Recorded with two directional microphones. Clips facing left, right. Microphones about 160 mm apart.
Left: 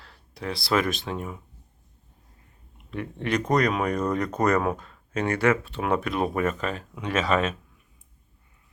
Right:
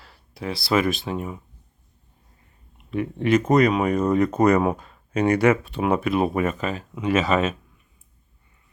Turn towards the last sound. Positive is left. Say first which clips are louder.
# right 4 dB
turn(degrees=-5)  # may be behind; listen again after turning